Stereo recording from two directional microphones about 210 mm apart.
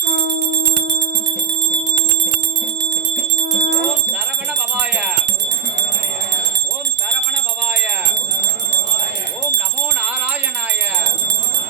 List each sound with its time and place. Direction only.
0.2 s music: 55° right (ahead or behind)
3.6 s music: 55° right (ahead or behind)
4.7 s music: 5° right (ahead or behind)
7.6 s music: 5° right (ahead or behind)
8.1 s jingle bell: 55° right (ahead or behind)